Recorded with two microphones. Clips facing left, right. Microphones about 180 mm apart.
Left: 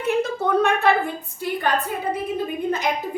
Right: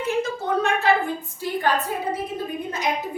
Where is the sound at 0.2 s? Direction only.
60° left (ahead or behind).